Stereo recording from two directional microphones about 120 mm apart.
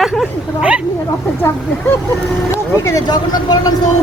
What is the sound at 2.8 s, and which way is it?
Speech, 25° left (ahead or behind).